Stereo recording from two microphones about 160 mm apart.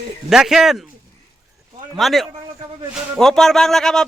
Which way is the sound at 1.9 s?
Centre (ahead or behind).